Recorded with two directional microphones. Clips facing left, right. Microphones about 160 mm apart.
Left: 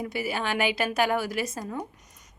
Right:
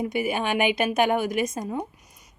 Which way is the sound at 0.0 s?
20° right (ahead or behind).